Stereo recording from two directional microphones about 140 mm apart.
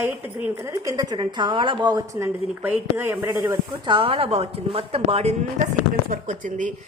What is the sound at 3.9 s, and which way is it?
A woman's voice, 40° right (ahead or behind).